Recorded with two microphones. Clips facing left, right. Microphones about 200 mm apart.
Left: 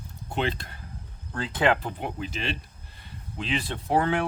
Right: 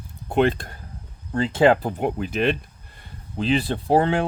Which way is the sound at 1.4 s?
25° right (ahead or behind).